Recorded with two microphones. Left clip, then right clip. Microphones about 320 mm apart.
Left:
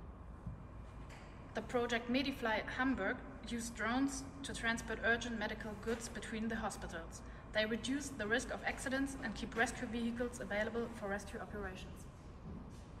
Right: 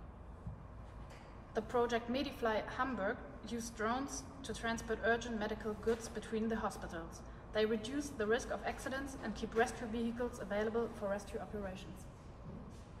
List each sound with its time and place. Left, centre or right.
1.5 s a woman's voice: centre
11.1 s speech: centre